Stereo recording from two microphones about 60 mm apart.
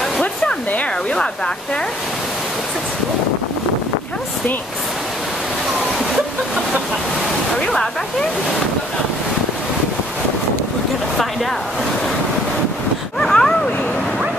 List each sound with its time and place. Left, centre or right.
0.2 s hair dryer: left
7.5 s speech: centre
13.2 s a sound: centre